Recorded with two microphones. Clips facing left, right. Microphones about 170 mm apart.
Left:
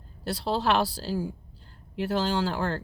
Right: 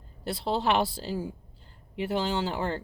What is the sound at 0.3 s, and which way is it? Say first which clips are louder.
Speech: left 1 dB; 20° right (ahead or behind).